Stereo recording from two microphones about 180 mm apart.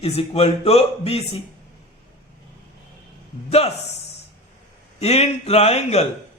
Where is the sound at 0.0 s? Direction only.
35° left (ahead or behind).